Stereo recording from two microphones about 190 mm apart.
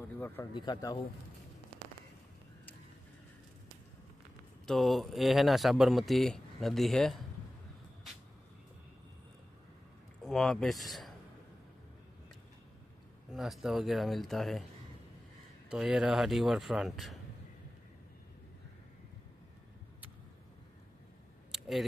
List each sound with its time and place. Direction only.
0.2 s speech: 20° left (ahead or behind)
4.6 s speech: centre (ahead or behind)
10.2 s speech: centre (ahead or behind)
13.3 s speech: centre (ahead or behind)
15.7 s speech: 5° right (ahead or behind)
21.5 s a sound: centre (ahead or behind)